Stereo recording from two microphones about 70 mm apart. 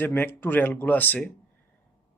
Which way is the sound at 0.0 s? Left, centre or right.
Left.